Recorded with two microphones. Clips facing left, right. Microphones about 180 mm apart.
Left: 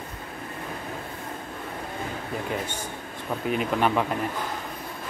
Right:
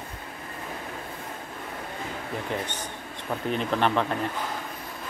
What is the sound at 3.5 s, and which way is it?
Speech, 10° left (ahead or behind).